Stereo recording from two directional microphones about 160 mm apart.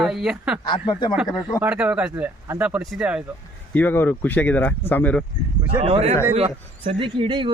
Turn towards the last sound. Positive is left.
turn(degrees=-30)  # may be behind; listen again after turning